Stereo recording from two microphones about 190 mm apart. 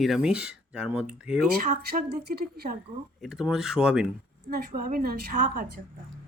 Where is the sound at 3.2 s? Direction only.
Centre (ahead or behind).